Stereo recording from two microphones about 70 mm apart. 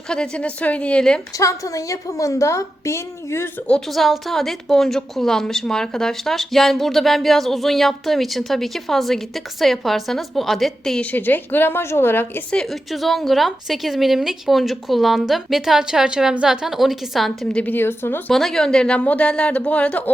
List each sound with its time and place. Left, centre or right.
0.1 s speech: centre
1.4 s a woman's voice: left
3.7 s a woman's voice: centre
11.0 s a woman's voice: left
12.6 s a woman's voice: centre
17.6 s a woman's voice: left
18.3 s speech: centre